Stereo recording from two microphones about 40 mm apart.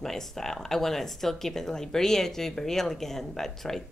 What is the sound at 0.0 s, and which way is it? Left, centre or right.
A woman's voice, centre.